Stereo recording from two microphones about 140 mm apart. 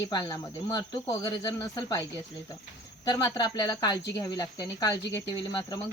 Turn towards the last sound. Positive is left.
turn(degrees=35)  # may be behind; listen again after turning